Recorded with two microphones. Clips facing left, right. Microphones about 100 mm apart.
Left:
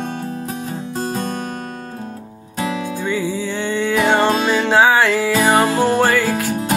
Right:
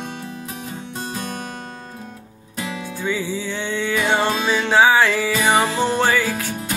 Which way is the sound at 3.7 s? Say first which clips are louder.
Left 4 dB; 15° left (ahead or behind).